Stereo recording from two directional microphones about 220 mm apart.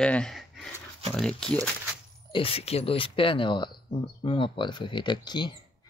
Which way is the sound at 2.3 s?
25° left (ahead or behind).